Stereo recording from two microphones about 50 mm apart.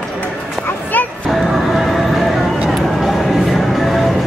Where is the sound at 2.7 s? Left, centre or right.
Centre.